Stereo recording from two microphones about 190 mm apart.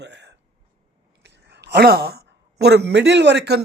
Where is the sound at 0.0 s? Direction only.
65° right (ahead or behind).